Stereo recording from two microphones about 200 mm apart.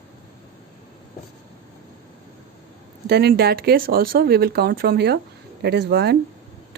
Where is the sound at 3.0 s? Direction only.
55° right (ahead or behind).